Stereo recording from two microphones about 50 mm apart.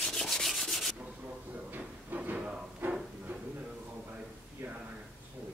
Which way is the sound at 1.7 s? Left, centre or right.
Right.